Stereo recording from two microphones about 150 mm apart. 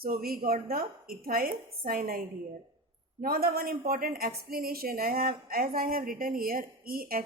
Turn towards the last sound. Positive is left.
turn(degrees=-75)  # may be behind; listen again after turning